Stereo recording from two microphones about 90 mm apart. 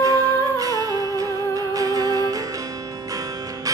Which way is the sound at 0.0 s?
40° right (ahead or behind).